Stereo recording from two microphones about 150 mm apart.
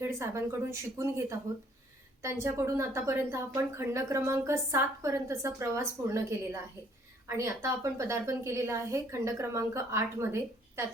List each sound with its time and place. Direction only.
0.0 s a woman's voice: 15° right (ahead or behind)